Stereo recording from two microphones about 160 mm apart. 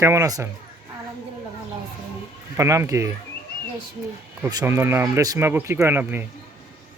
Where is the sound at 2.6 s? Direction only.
20° right (ahead or behind).